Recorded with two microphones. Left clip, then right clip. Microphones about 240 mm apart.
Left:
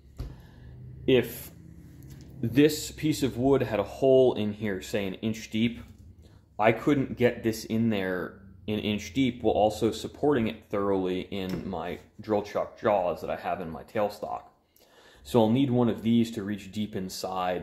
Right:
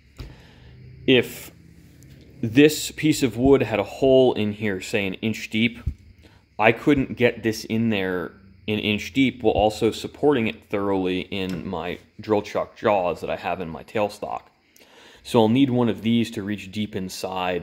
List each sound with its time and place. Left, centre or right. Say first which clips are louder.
1.0 s speech: right 5 dB; right